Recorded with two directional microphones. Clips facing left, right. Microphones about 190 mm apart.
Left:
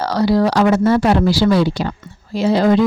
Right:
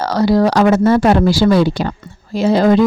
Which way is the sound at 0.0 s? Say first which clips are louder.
Right 2 dB; 45° right (ahead or behind).